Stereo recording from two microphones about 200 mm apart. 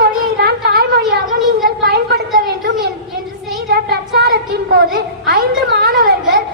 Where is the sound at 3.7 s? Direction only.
55° right (ahead or behind).